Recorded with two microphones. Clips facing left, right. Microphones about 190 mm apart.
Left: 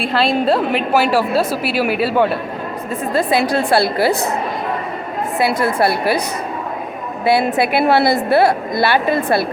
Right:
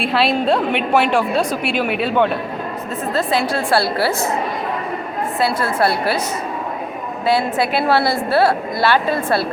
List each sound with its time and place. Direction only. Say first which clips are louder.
0.0 s a woman's voice: left 1 dB; centre (ahead or behind); by 4.1 s 15° left (ahead or behind)
5.4 s a woman's voice: left 2 dB; 15° left (ahead or behind)
7.3 s a woman's voice: left 3 dB; 15° left (ahead or behind)